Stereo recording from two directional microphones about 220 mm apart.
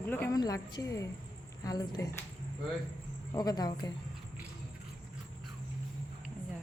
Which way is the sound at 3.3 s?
15° left (ahead or behind).